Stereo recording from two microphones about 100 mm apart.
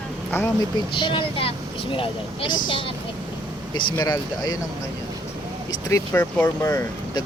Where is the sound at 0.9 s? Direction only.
60° left (ahead or behind).